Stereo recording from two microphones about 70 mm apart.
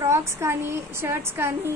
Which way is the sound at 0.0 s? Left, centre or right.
Right.